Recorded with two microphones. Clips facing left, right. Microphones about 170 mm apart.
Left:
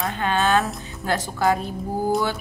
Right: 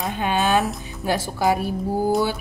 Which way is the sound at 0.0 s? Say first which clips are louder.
Even; 15° right (ahead or behind).